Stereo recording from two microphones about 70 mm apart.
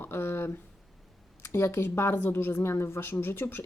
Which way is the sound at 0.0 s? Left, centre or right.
Left.